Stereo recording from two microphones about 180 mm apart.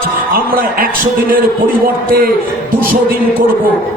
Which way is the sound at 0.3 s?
55° right (ahead or behind).